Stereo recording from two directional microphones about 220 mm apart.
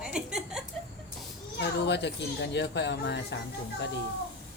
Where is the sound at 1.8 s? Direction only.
50° left (ahead or behind).